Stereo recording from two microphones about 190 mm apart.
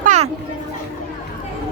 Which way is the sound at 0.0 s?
40° right (ahead or behind).